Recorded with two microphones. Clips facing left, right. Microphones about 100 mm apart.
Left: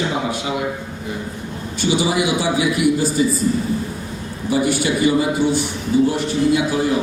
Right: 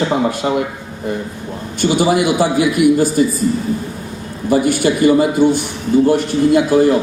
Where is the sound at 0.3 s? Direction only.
50° right (ahead or behind).